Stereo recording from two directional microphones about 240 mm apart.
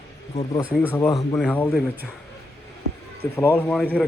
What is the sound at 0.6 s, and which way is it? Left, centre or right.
Speech, centre.